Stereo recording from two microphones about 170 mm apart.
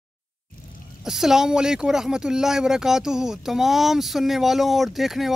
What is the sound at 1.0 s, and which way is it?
Speech, 5° right (ahead or behind).